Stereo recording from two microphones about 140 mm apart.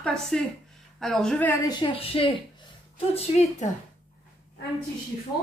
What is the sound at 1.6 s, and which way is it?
A woman's voice, 35° left (ahead or behind).